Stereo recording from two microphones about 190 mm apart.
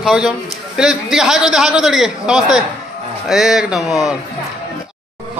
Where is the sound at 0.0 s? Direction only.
Centre (ahead or behind).